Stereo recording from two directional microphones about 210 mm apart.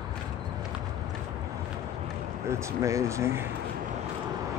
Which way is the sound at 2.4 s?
15° right (ahead or behind).